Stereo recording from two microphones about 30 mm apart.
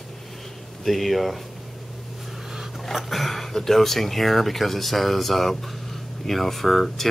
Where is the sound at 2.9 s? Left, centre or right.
Centre.